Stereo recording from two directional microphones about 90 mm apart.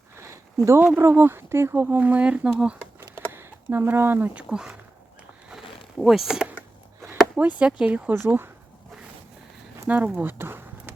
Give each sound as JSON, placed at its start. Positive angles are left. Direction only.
{"t": 0.2, "sound": "a sound", "side_deg": -30}
{"t": 0.9, "sound": "speech", "side_deg": -25}
{"t": 3.2, "sound": "a sound", "side_deg": -25}
{"t": 4.4, "sound": "speech", "side_deg": -5}
{"t": 6.0, "sound": "speech", "side_deg": -5}
{"t": 7.0, "sound": "a sound", "side_deg": -20}
{"t": 7.6, "sound": "speech", "side_deg": -15}
{"t": 8.1, "sound": "speech", "side_deg": -25}
{"t": 9.9, "sound": "speech", "side_deg": -15}